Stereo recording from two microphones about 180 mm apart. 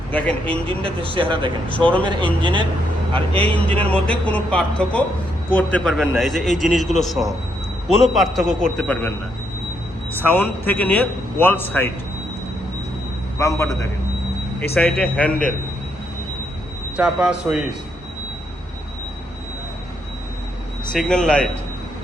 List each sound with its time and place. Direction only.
0.1 s a man's voice: 5° left (ahead or behind)
1.1 s speech: 30° right (ahead or behind)
1.8 s a man's voice: 5° left (ahead or behind)
2.0 s speech: 25° right (ahead or behind)
3.5 s a man's voice: 5° left (ahead or behind)
13.4 s a man's voice: 15° left (ahead or behind)
14.8 s a man's voice: 5° left (ahead or behind)
17.0 s a man's voice: 5° right (ahead or behind)
20.9 s a man's voice: 5° left (ahead or behind)